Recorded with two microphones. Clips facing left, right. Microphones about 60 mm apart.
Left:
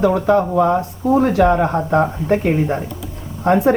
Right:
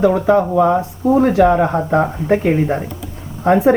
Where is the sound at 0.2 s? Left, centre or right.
Centre.